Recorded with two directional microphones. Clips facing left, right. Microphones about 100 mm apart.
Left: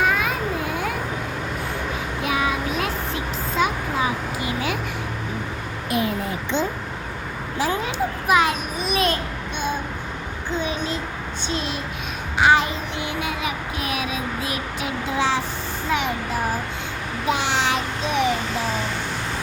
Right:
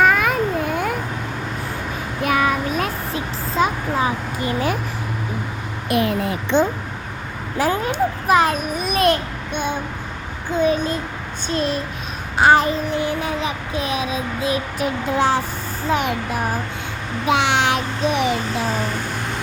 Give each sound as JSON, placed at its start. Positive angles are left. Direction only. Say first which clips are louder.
{"t": 0.0, "sound": "cat", "louder": "right 5 dB", "side_deg": -55}
{"t": 2.2, "sound": "child singing", "louder": "right 5 dB", "side_deg": -50}
{"t": 3.5, "sound": "a sound", "louder": "right 3 dB", "side_deg": -35}
{"t": 5.9, "sound": "a child's voice", "louder": "right 4 dB", "side_deg": -65}
{"t": 7.6, "sound": "a child's voice", "louder": "right 4 dB", "side_deg": -50}
{"t": 10.6, "sound": "a child's voice", "louder": "right 10 dB", "side_deg": -45}
{"t": 12.4, "sound": "a sound", "louder": "right 3 dB", "side_deg": -40}
{"t": 14.8, "sound": "a child's voice", "louder": "right 3 dB", "side_deg": -45}
{"t": 15.9, "sound": "a sound", "louder": "right 3 dB", "side_deg": -35}
{"t": 17.2, "sound": "a child's voice", "louder": "right 4 dB", "side_deg": -70}